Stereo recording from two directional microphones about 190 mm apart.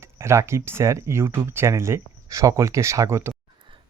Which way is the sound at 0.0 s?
15° right (ahead or behind).